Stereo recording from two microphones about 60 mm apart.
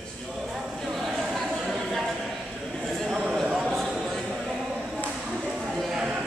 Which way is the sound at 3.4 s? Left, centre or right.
Centre.